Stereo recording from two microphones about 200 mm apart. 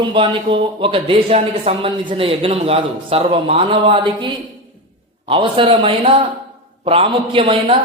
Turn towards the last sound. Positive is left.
turn(degrees=-25)  # may be behind; listen again after turning